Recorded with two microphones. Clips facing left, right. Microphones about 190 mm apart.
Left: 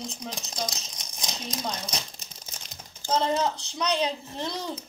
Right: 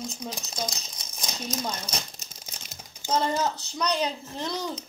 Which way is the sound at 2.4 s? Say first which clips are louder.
Even; 5° right (ahead or behind).